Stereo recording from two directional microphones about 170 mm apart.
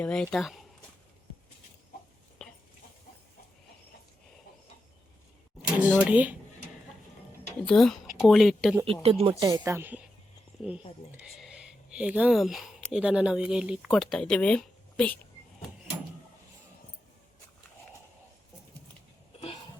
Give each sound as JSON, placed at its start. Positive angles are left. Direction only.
{"t": 0.0, "sound": "speech", "side_deg": 5}
{"t": 2.4, "sound": "a sound", "side_deg": 5}
{"t": 5.8, "sound": "speech", "side_deg": -10}
{"t": 7.6, "sound": "speech", "side_deg": 5}
{"t": 9.0, "sound": "speech", "side_deg": -35}
{"t": 9.4, "sound": "speech", "side_deg": -20}
{"t": 11.2, "sound": "speech", "side_deg": 0}